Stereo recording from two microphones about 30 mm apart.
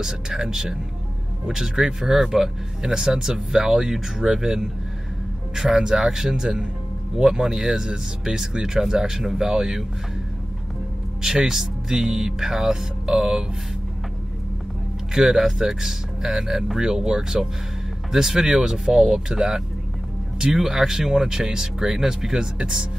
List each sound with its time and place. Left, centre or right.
0.0 s speech: centre
11.2 s speech: centre
15.1 s speech: centre